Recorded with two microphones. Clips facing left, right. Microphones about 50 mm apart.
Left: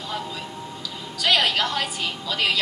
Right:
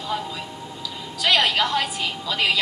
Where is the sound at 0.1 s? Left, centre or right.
Centre.